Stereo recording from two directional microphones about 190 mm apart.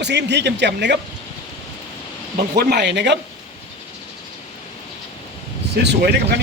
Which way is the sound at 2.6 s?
60° right (ahead or behind).